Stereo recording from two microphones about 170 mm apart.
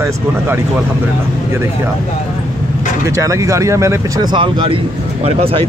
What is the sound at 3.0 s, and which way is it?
Speech, 15° right (ahead or behind).